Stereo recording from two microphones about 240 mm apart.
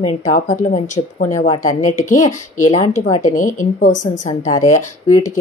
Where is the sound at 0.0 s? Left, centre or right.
Left.